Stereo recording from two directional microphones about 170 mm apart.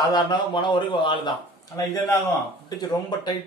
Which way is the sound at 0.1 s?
25° left (ahead or behind).